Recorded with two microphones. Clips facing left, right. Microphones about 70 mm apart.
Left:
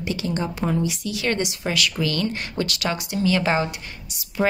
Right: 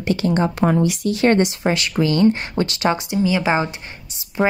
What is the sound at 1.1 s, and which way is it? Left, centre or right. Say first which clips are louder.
Speech: right 12 dB; right.